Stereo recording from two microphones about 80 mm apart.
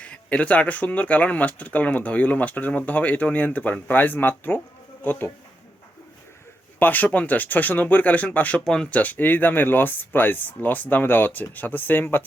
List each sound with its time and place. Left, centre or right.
0.0 s speech: centre
6.7 s speech: left